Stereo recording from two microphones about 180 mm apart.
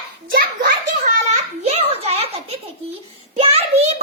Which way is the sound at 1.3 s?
35° right (ahead or behind).